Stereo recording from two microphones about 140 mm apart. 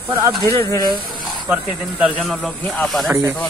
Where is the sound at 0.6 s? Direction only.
25° left (ahead or behind).